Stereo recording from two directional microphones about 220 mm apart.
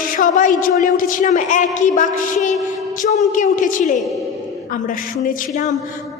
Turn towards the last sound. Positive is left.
turn(degrees=35)  # may be behind; listen again after turning